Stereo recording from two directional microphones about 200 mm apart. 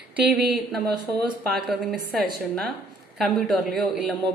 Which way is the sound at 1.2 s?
Centre (ahead or behind).